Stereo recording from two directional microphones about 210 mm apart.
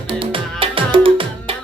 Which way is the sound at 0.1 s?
25° right (ahead or behind).